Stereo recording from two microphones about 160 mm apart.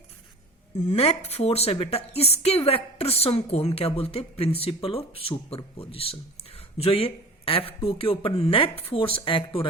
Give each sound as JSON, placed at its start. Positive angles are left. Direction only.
{"t": 0.8, "sound": "a woman's voice", "side_deg": 40}